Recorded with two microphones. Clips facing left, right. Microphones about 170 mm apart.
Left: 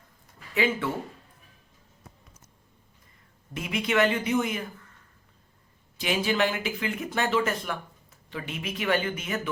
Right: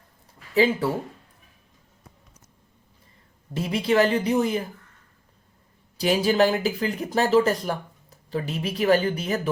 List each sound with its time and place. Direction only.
0.5 s speech: 35° right (ahead or behind)
3.5 s speech: 35° right (ahead or behind)
6.0 s speech: 35° right (ahead or behind)